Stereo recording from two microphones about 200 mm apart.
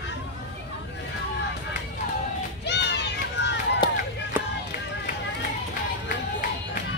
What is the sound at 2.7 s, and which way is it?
Children playing, 60° left (ahead or behind).